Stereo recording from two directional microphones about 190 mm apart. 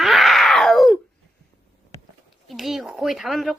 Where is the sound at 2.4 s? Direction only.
Centre (ahead or behind).